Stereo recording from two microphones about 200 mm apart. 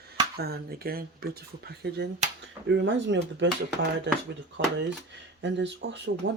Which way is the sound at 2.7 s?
65° right (ahead or behind).